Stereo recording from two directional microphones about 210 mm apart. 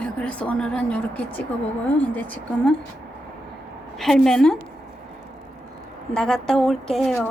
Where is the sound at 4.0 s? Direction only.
Centre (ahead or behind).